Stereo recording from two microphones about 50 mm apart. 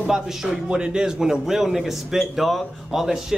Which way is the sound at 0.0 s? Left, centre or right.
Centre.